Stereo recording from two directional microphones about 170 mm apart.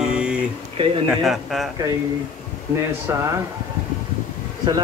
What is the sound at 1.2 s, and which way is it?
Speech, centre (ahead or behind).